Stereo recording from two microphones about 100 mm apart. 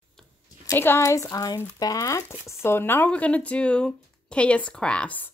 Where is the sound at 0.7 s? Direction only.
25° left (ahead or behind).